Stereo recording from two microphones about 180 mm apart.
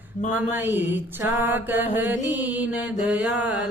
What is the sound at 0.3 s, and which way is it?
Mantra, 10° right (ahead or behind).